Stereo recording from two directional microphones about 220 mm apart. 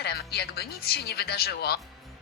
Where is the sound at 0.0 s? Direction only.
45° left (ahead or behind).